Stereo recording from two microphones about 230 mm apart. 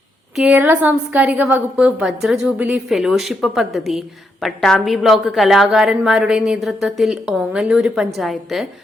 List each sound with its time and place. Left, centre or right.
0.3 s a woman's voice: centre